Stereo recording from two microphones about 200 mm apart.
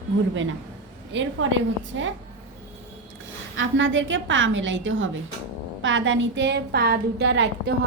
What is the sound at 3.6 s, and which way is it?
A woman's voice, 70° right (ahead or behind).